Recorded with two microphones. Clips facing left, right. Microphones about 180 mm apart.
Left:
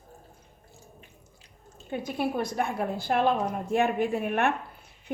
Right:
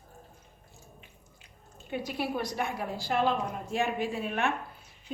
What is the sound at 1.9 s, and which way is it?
A woman's voice, 50° left (ahead or behind).